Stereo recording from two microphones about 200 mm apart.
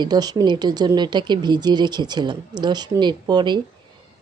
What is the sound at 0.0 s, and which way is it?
Speech, 20° right (ahead or behind).